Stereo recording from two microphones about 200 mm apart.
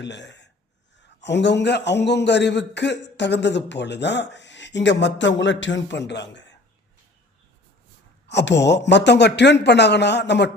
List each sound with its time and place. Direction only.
0.0 s a man's voice: 60° left (ahead or behind)
8.3 s a man's voice: 60° left (ahead or behind)